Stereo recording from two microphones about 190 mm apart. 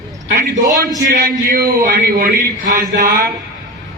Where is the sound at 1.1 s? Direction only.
50° right (ahead or behind).